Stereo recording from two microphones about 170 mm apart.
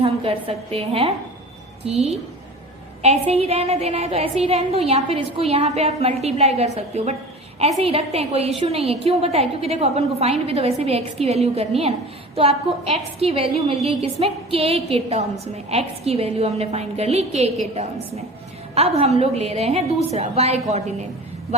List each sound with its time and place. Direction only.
0.0 s a woman's voice: 35° right (ahead or behind)
18.7 s a woman's voice: 35° right (ahead or behind)